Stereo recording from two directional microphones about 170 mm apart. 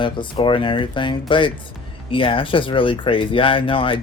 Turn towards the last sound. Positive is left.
turn(degrees=30)  # may be behind; listen again after turning